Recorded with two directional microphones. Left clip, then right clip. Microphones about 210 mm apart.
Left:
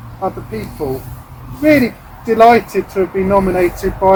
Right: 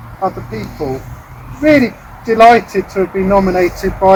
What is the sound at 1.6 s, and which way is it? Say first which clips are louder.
Speech: right 1 dB; 15° left (ahead or behind).